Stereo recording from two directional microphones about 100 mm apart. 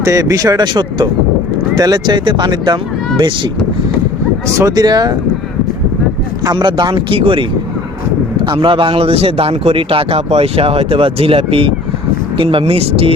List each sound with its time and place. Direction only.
0.0 s speech: 35° right (ahead or behind); by 3.5 s 55° right (ahead or behind)
4.6 s speech: 40° right (ahead or behind)
6.4 s speech: 45° right (ahead or behind); by 7.4 s 60° right (ahead or behind)
8.5 s a man's voice: 55° right (ahead or behind); by 13.1 s 75° right (ahead or behind)